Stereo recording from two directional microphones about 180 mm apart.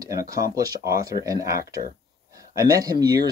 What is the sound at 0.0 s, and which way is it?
Speech, 20° right (ahead or behind).